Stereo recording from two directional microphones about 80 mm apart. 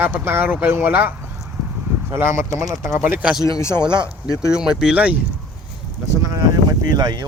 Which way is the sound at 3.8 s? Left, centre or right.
Right.